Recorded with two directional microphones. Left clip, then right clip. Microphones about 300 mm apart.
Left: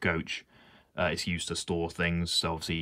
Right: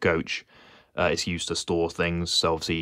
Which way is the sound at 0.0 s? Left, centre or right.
Centre.